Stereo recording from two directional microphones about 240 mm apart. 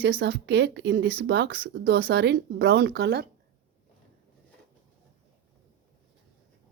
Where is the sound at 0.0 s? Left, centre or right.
Right.